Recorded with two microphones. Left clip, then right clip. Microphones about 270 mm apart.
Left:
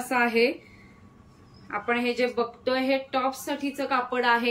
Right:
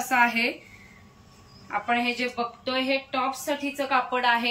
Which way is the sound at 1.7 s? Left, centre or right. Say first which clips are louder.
Right 1 dB; centre.